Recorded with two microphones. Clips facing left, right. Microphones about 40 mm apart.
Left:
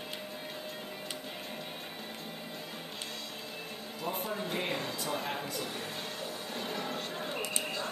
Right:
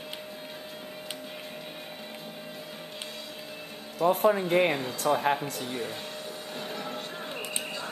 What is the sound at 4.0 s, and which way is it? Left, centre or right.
Speech, right.